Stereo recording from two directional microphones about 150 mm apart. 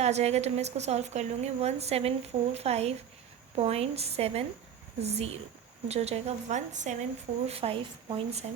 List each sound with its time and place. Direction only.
0.0 s a woman's voice: 45° right (ahead or behind)